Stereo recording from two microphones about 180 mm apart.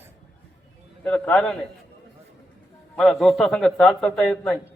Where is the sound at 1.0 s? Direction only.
5° left (ahead or behind).